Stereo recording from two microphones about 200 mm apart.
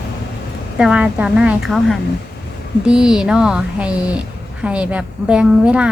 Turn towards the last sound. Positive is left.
turn(degrees=-5)  # may be behind; listen again after turning